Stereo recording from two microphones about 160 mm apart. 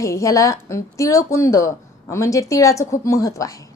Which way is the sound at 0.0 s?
20° left (ahead or behind).